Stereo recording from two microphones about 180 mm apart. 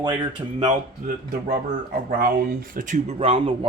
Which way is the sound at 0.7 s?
45° right (ahead or behind).